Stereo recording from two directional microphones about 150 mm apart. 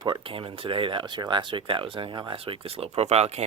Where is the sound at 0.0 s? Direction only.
35° right (ahead or behind).